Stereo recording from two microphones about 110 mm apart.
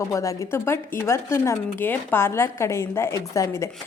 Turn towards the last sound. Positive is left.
turn(degrees=30)  # may be behind; listen again after turning